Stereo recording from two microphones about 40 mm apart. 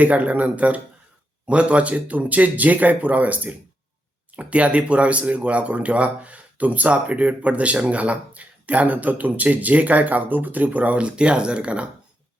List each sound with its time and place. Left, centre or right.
0.0 s speech: right
11.0 s speech: right